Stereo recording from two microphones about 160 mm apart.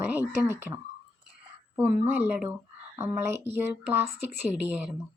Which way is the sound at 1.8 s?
10° right (ahead or behind).